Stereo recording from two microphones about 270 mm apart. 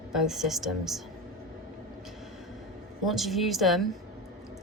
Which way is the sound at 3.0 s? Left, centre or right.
Centre.